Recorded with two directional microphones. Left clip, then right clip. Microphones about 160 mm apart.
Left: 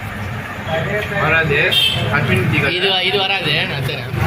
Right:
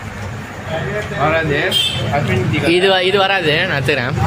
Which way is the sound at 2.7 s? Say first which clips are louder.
Right 6 dB; 40° right (ahead or behind).